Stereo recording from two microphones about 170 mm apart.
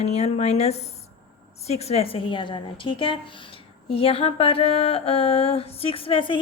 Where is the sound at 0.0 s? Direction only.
40° left (ahead or behind).